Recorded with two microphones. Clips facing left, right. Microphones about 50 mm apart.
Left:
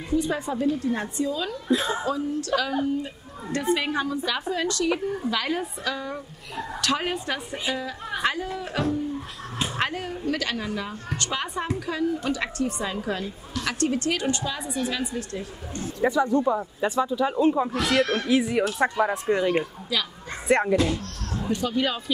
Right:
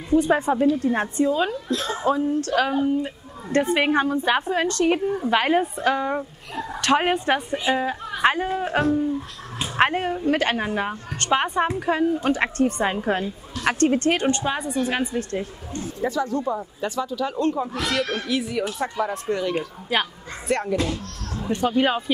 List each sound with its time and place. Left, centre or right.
0.1 s a woman's voice: right
1.7 s speech: centre
2.0 s a woman's voice: right
3.7 s a woman's voice: right
16.1 s speech: centre
17.8 s speech: centre
19.9 s a woman's voice: right
20.4 s a child's voice: left
21.5 s a woman's voice: right